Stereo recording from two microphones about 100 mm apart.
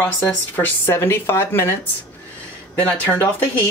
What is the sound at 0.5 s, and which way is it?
Speech, 25° left (ahead or behind).